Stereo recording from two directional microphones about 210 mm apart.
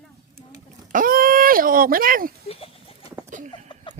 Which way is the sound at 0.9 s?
40° right (ahead or behind).